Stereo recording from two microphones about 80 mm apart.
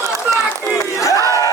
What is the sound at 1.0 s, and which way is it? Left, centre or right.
Crowd, left.